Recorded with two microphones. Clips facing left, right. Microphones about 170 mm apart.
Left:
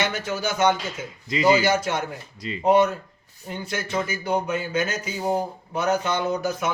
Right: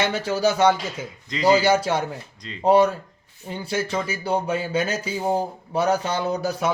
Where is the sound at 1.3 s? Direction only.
10° left (ahead or behind).